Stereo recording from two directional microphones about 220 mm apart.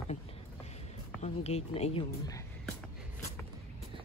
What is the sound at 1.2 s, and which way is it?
Speech, 30° left (ahead or behind).